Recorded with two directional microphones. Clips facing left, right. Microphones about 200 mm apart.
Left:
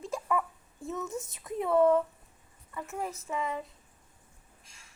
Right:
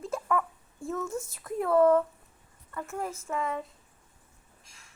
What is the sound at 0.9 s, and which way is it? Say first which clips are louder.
Speech: right 3 dB; 20° left (ahead or behind).